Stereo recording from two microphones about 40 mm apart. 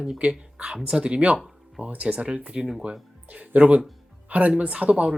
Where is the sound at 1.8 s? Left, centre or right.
Right.